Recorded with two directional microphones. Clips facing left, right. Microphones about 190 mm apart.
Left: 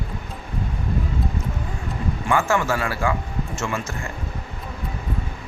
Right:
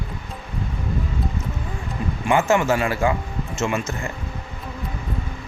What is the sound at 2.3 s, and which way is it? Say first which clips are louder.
Speech: right 3 dB; 20° right (ahead or behind).